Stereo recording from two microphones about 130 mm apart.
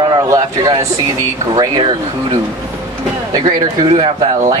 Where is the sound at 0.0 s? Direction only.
30° right (ahead or behind).